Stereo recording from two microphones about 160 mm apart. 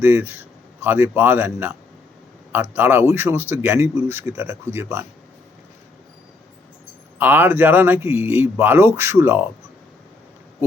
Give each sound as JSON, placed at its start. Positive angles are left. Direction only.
{"t": 0.0, "sound": "a man's voice", "side_deg": -15}
{"t": 7.2, "sound": "speech", "side_deg": -10}